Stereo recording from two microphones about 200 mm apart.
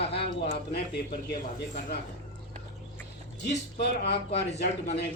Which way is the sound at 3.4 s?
55° left (ahead or behind).